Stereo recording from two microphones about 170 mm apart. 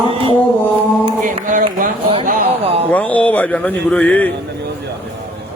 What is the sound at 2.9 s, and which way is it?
Speech, 10° left (ahead or behind).